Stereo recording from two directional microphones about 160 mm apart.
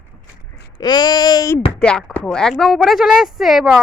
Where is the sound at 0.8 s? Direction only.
25° left (ahead or behind).